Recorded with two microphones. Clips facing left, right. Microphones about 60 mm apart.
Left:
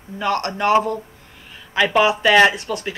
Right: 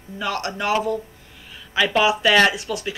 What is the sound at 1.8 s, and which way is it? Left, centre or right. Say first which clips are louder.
Speech: left 2 dB; left.